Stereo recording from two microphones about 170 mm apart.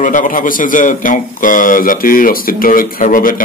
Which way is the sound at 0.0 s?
50° left (ahead or behind).